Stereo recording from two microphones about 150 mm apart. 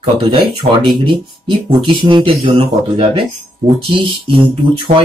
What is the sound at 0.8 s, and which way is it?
Speech, 30° right (ahead or behind).